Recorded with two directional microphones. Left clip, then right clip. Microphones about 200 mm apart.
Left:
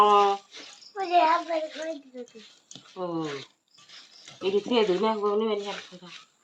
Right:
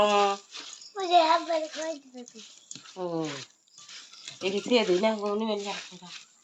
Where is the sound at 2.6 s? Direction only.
55° right (ahead or behind).